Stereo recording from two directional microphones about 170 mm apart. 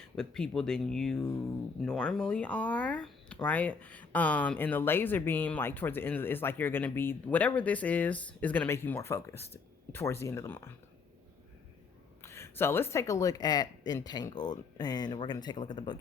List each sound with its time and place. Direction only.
0.0 s speech: 5° left (ahead or behind)
12.2 s speech: 15° left (ahead or behind)